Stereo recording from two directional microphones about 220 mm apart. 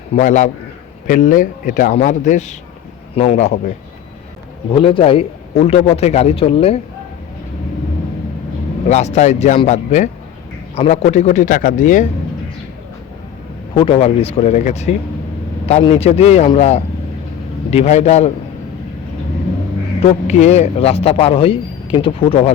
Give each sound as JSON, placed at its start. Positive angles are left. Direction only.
{"t": 0.2, "sound": "a man's voice", "side_deg": 35}
{"t": 4.7, "sound": "a man's voice", "side_deg": 25}
{"t": 8.9, "sound": "a man's voice", "side_deg": 30}
{"t": 13.7, "sound": "a man's voice", "side_deg": 25}
{"t": 20.0, "sound": "a man's voice", "side_deg": 30}